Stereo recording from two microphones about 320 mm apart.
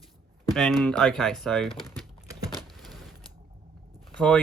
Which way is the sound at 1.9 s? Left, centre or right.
Centre.